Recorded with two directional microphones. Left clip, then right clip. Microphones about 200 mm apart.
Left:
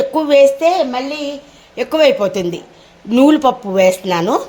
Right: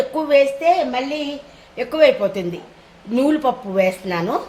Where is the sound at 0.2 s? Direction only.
40° left (ahead or behind).